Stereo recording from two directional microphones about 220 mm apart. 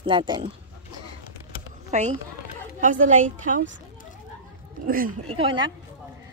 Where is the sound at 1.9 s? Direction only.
30° right (ahead or behind).